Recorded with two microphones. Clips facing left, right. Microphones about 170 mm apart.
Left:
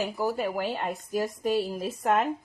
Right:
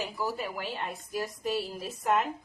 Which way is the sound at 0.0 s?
50° left (ahead or behind).